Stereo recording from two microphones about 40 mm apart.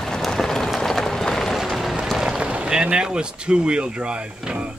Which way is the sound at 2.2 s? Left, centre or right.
Right.